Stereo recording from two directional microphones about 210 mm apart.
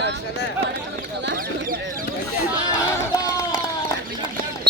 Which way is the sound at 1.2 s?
50° right (ahead or behind).